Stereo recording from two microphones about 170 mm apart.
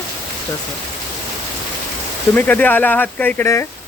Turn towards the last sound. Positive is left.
turn(degrees=15)  # may be behind; listen again after turning